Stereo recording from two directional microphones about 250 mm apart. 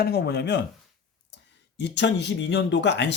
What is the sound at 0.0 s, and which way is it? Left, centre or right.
Speech, left.